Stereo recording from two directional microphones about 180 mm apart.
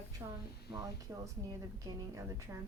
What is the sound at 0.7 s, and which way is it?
A woman's voice, 10° right (ahead or behind).